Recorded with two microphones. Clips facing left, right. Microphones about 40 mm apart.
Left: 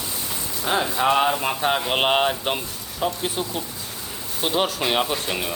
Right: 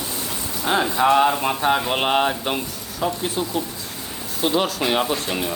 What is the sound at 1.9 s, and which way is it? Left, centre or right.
Speech, centre.